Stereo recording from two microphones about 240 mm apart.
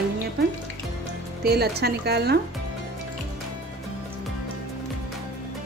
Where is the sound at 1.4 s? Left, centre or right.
Right.